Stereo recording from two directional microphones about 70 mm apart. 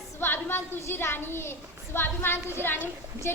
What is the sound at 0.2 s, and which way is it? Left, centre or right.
A child's voice, left.